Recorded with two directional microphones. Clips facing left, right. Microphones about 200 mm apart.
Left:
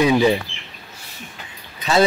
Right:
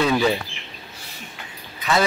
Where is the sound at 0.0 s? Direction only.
15° left (ahead or behind).